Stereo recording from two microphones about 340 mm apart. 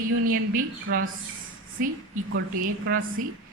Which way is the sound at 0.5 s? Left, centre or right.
Right.